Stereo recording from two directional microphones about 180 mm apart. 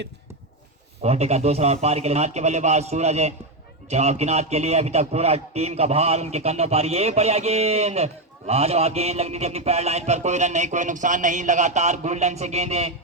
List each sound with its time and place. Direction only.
1.0 s a man's voice: 35° right (ahead or behind)